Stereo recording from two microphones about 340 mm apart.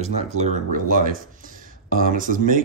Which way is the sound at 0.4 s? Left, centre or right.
Right.